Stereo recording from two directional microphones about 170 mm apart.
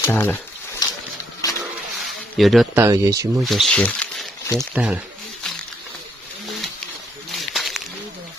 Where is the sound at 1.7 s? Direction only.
Centre (ahead or behind).